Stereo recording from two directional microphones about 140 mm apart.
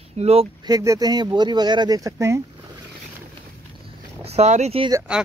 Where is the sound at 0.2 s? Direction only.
45° right (ahead or behind).